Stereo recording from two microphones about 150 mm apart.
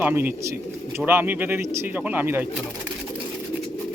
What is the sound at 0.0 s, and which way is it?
Speech, 15° right (ahead or behind).